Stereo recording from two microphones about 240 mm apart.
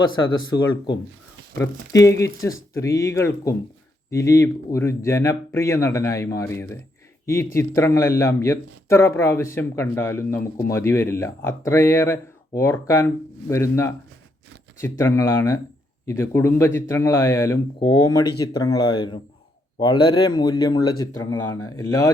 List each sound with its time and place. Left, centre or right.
0.5 s speech: centre